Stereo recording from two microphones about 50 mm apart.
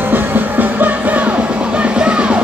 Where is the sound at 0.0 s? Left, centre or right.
Right.